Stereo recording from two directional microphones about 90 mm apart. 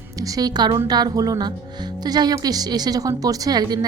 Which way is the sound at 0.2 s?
45° right (ahead or behind).